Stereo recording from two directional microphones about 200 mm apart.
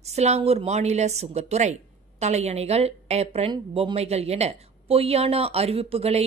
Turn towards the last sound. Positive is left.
turn(degrees=-30)  # may be behind; listen again after turning